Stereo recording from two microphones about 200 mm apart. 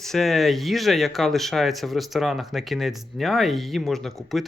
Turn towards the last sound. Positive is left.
turn(degrees=0)  # may be behind; listen again after turning